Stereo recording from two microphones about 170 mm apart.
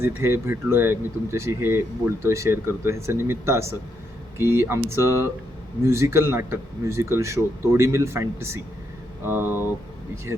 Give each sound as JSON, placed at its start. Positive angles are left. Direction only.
{"t": 0.0, "sound": "speech", "side_deg": -15}